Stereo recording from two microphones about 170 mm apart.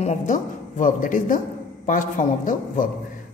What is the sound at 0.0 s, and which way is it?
A woman's voice, 45° left (ahead or behind).